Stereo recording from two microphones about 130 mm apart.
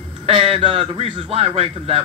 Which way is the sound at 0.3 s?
50° right (ahead or behind).